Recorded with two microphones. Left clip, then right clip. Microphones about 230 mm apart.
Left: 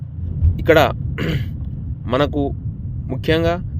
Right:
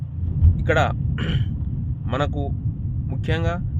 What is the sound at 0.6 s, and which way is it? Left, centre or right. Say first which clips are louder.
Speech: left 8 dB; left.